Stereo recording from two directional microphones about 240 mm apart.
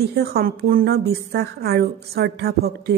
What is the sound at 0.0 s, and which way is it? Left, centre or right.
A woman's voice, right.